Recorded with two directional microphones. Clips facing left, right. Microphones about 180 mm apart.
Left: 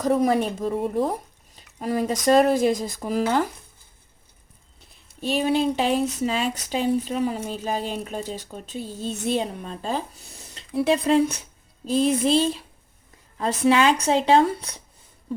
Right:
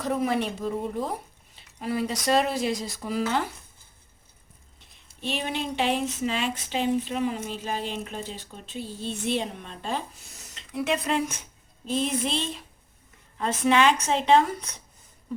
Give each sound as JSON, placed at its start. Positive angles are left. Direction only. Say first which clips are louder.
{"t": 0.0, "sound": "speech", "louder": "left 5 dB", "side_deg": 40}
{"t": 1.5, "sound": "a sound", "louder": "left 4 dB", "side_deg": 40}
{"t": 2.2, "sound": "speech", "louder": "left 8 dB", "side_deg": 45}
{"t": 4.8, "sound": "speech", "louder": "left 4 dB", "side_deg": 40}